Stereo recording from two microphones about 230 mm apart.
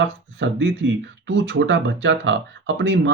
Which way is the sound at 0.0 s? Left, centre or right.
Right.